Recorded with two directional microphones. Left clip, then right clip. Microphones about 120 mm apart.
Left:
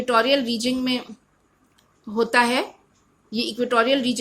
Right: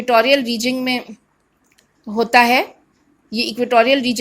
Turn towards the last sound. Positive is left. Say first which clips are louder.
# right 6 dB
turn(degrees=-35)  # may be behind; listen again after turning